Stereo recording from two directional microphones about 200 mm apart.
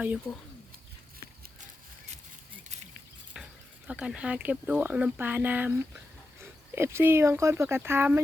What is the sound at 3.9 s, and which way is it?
Speech, 5° right (ahead or behind).